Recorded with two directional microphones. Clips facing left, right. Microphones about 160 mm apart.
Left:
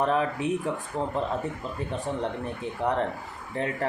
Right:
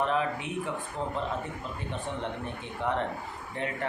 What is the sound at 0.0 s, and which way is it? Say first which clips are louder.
Speech: left 4 dB; 40° left (ahead or behind).